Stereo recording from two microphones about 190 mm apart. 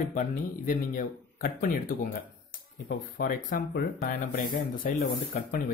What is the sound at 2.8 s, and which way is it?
Speech, 50° left (ahead or behind).